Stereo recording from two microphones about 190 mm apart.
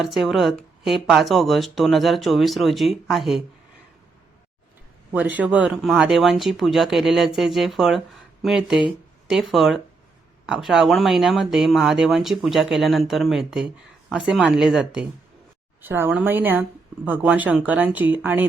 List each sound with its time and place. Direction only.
0.0 s speech: centre (ahead or behind)
5.1 s speech: 10° right (ahead or behind)